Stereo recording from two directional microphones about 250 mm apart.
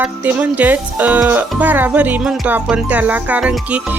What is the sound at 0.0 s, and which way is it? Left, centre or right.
Speech, centre.